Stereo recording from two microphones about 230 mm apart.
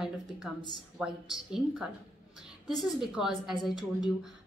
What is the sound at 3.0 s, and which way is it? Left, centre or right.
Speech, centre.